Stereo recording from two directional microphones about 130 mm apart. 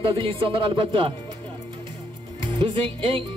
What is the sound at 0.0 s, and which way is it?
Speech, 40° right (ahead or behind).